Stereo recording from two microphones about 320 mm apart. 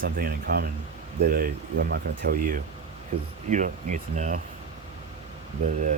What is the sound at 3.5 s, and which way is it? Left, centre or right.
Speech, right.